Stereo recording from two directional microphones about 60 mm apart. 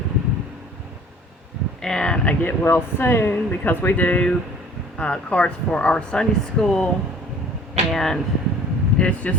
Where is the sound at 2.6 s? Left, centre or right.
Left; by 6.7 s centre.